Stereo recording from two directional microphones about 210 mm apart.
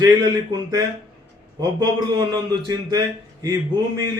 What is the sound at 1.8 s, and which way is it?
A man's voice, 20° right (ahead or behind).